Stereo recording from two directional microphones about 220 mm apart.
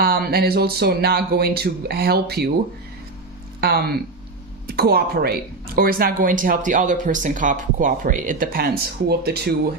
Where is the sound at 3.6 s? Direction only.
45° right (ahead or behind).